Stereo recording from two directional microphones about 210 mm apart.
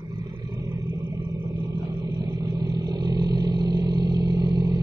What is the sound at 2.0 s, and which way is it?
Vehicle, 15° right (ahead or behind).